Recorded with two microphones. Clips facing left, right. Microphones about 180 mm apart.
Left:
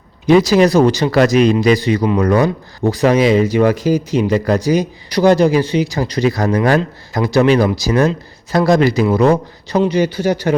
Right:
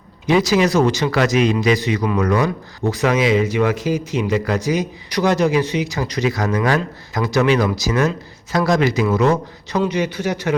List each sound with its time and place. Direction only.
0.3 s speech: 35° left (ahead or behind)